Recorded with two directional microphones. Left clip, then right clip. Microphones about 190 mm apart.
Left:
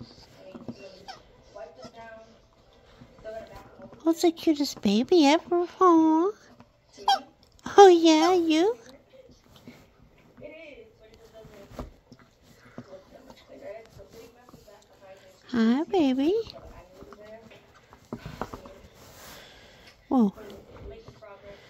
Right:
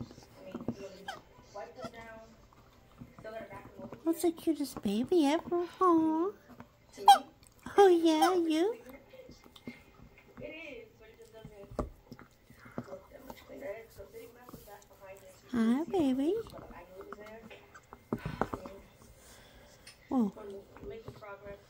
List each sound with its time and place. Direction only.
0.5 s a sound: 15° right (ahead or behind)
4.0 s speech: 40° left (ahead or behind)
7.6 s speech: 40° left (ahead or behind)
15.4 s speech: 35° left (ahead or behind)
18.1 s clip-clop: 15° right (ahead or behind)
20.1 s a sound: 40° left (ahead or behind)